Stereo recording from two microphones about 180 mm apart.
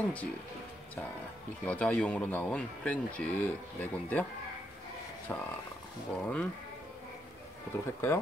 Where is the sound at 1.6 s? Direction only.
5° left (ahead or behind).